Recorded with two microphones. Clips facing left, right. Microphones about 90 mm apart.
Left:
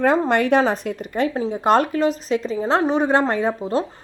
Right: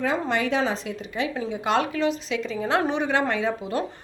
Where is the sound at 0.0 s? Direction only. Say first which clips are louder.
Left 7 dB; 55° left (ahead or behind).